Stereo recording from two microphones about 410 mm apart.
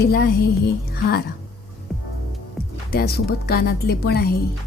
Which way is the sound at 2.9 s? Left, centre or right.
Left.